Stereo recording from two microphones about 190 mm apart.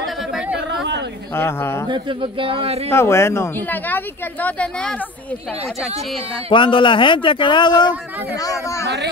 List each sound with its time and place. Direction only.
1.3 s a woman's voice: 10° left (ahead or behind)
1.9 s speech: 25° right (ahead or behind)
2.9 s a woman's voice: 15° left (ahead or behind)
6.5 s a woman's voice: 25° left (ahead or behind)
8.8 s speech: 65° right (ahead or behind)